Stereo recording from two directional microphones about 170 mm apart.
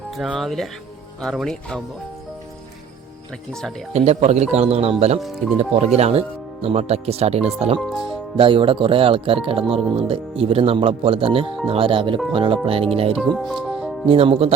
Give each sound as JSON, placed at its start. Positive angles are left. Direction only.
{"t": 0.2, "sound": "speech", "side_deg": 0}
{"t": 3.9, "sound": "speech", "side_deg": -40}
{"t": 13.3, "sound": "speech", "side_deg": 0}
{"t": 13.7, "sound": "music", "side_deg": -5}
{"t": 14.1, "sound": "speech", "side_deg": -35}